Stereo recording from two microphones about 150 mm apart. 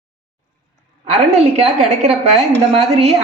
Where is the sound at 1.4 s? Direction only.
45° right (ahead or behind).